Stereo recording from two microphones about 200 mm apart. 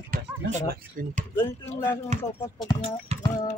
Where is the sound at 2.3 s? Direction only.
15° left (ahead or behind).